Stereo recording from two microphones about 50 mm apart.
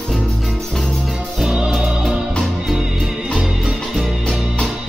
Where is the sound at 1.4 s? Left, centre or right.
Centre.